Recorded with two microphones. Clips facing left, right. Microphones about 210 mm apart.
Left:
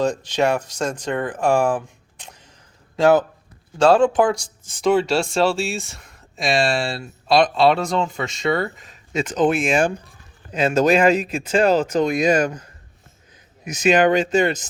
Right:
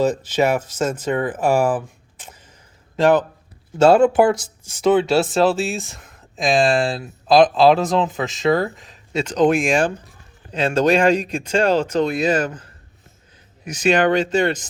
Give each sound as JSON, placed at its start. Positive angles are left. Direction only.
{"t": 0.0, "sound": "speech", "side_deg": -5}
{"t": 3.8, "sound": "speech", "side_deg": -10}
{"t": 13.7, "sound": "speech", "side_deg": 10}